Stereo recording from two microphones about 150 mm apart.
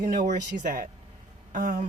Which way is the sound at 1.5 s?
60° right (ahead or behind).